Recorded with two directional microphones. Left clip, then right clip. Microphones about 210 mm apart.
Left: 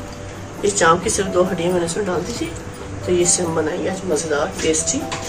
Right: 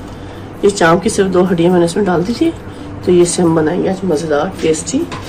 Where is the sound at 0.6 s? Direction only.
45° right (ahead or behind).